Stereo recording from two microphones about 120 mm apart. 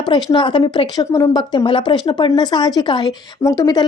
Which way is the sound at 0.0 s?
35° left (ahead or behind).